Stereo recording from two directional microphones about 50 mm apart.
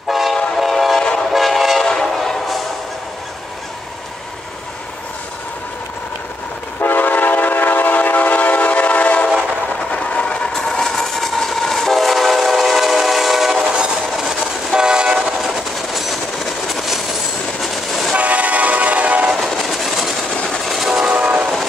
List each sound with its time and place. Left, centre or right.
0.1 s train: centre
6.8 s train: left; by 15.3 s centre
15.3 s train: centre
18.1 s train: right
19.5 s train: centre
21.1 s train: right